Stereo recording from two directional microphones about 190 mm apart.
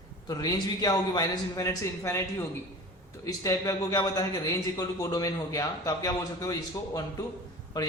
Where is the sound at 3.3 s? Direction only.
20° left (ahead or behind).